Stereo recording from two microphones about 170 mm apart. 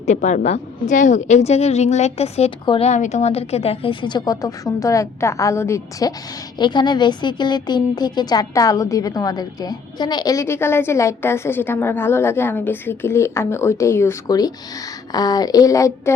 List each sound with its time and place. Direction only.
0.0 s a woman's voice: 45° left (ahead or behind); by 16.1 s 20° left (ahead or behind)